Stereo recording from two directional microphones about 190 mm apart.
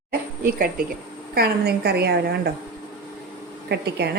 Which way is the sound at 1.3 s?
55° right (ahead or behind).